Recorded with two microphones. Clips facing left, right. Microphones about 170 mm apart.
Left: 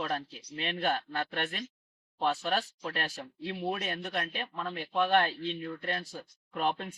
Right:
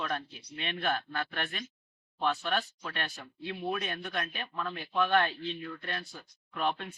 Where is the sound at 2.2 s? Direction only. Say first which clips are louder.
Left 1 dB; 35° left (ahead or behind).